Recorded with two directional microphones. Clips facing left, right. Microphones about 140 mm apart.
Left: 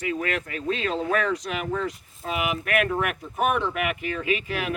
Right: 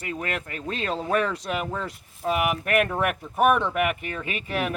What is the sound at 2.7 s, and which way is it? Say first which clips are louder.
Speech: even; 35° right (ahead or behind).